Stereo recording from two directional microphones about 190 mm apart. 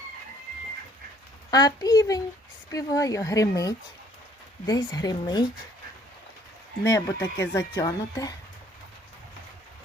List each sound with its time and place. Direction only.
1.5 s speech: 20° left (ahead or behind)
6.8 s speech: 15° left (ahead or behind)